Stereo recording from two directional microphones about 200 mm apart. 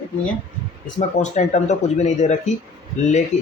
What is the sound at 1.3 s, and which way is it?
Speech, 35° left (ahead or behind).